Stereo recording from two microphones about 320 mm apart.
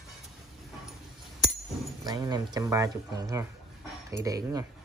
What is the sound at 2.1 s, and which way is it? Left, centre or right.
Speech, centre.